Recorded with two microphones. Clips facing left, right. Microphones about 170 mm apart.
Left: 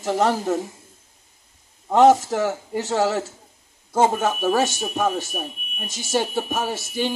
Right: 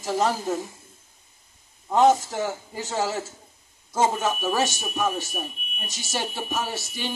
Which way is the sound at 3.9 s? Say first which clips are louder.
Left 4 dB; 50° left (ahead or behind).